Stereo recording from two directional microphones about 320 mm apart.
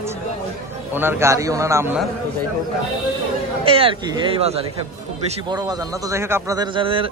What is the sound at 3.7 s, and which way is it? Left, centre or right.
A man's voice, centre.